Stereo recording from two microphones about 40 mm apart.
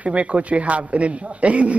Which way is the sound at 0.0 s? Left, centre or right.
Right.